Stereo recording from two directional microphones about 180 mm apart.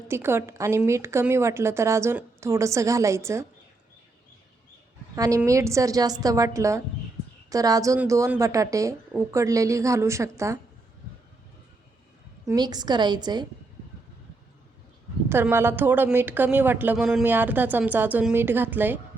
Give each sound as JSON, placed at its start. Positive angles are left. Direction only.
{"t": 0.1, "sound": "a woman's voice", "side_deg": -15}
{"t": 5.1, "sound": "a woman's voice", "side_deg": -20}
{"t": 12.5, "sound": "a woman's voice", "side_deg": -20}
{"t": 15.3, "sound": "a woman's voice", "side_deg": -10}